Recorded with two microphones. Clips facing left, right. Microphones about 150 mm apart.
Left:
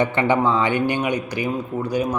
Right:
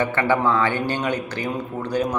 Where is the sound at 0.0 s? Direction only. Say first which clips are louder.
Left 2 dB; 20° left (ahead or behind).